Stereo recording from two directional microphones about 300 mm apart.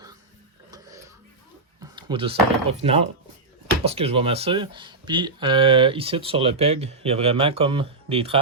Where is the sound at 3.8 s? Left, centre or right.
Centre.